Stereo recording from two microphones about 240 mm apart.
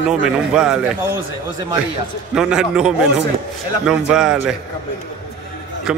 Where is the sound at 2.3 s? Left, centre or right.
Centre.